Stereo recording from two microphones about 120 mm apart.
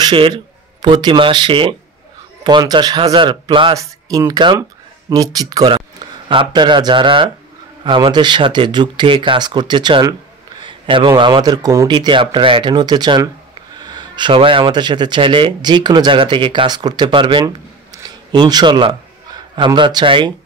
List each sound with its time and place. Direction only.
0.0 s a man's voice: 40° right (ahead or behind)
2.4 s speech: 35° right (ahead or behind)
3.7 s a man's voice: 30° right (ahead or behind)